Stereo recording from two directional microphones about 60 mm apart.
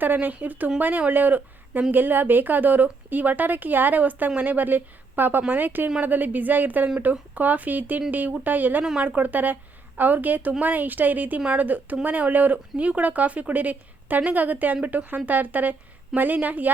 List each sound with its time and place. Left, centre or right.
0.0 s a woman's voice: right
11.3 s a woman's voice: centre
11.6 s speech: right